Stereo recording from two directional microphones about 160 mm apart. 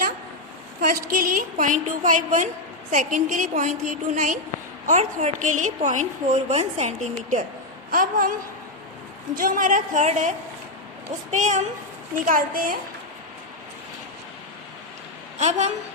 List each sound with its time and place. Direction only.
0.8 s a woman's voice: 60° right (ahead or behind)
7.9 s a woman's voice: 60° right (ahead or behind)
9.4 s a woman's voice: 55° right (ahead or behind)
15.4 s a woman's voice: 45° right (ahead or behind)